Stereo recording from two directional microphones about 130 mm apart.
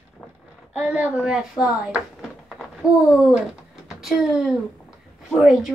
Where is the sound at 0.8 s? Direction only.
10° right (ahead or behind).